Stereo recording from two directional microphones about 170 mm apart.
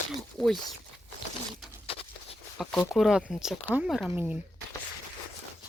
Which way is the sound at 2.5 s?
Centre (ahead or behind).